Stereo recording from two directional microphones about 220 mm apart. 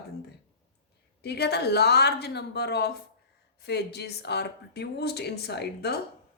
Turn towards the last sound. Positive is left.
turn(degrees=50)  # may be behind; listen again after turning